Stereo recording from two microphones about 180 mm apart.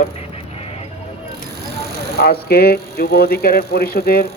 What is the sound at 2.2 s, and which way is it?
Speech, 60° left (ahead or behind).